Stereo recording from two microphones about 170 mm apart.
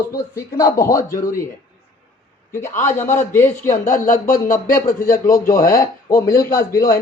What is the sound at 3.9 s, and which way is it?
Speech, 55° left (ahead or behind).